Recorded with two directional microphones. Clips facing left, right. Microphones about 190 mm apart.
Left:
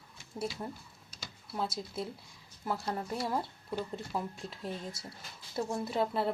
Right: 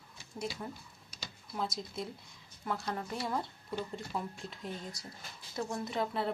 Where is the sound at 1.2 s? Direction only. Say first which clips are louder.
Left 1 dB; 5° left (ahead or behind).